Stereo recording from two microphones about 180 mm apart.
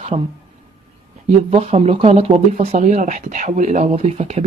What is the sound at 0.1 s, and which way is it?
Speech, 25° right (ahead or behind).